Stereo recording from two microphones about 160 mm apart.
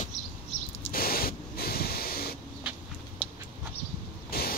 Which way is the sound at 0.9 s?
70° left (ahead or behind).